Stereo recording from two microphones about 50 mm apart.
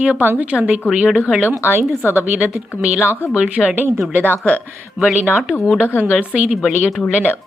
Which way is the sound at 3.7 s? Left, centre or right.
Right.